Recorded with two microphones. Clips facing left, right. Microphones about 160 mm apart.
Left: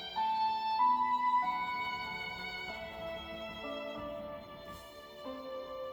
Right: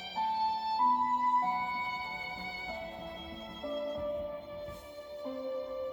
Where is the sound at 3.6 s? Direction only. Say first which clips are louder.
Right 8 dB; 40° right (ahead or behind).